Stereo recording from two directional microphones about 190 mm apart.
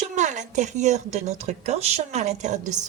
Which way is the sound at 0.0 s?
40° right (ahead or behind).